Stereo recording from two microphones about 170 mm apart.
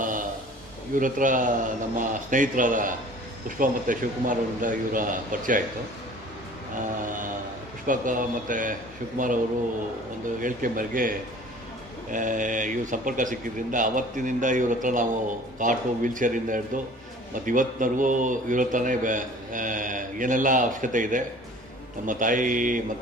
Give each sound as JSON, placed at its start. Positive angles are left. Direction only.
{"t": 0.9, "sound": "speech", "side_deg": -50}
{"t": 7.8, "sound": "speech", "side_deg": -50}
{"t": 10.4, "sound": "speech", "side_deg": -55}